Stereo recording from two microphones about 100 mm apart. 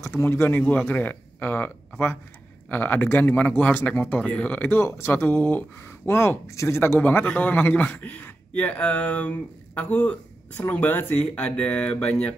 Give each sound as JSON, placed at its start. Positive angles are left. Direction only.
{"t": 0.0, "sound": "speech", "side_deg": 25}